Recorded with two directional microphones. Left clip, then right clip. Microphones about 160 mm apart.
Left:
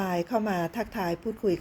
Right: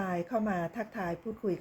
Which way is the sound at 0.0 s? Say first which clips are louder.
Left 5 dB; 40° left (ahead or behind).